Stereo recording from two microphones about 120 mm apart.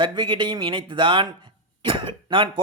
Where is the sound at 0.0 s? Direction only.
40° right (ahead or behind).